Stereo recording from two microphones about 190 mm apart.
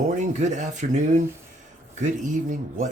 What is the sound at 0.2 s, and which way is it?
Speech, 40° right (ahead or behind).